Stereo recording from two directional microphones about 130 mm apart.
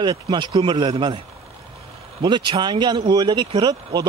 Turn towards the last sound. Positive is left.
turn(degrees=-30)  # may be behind; listen again after turning